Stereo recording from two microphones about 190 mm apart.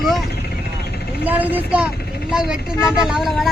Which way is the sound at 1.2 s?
10° right (ahead or behind).